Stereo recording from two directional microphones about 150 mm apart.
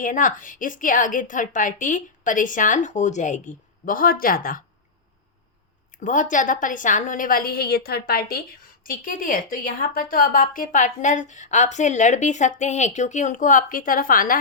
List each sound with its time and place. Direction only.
0.0 s a woman's voice: 60° left (ahead or behind)
5.9 s a woman's voice: 55° left (ahead or behind)